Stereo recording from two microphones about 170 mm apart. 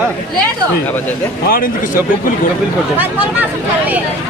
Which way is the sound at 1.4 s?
60° left (ahead or behind).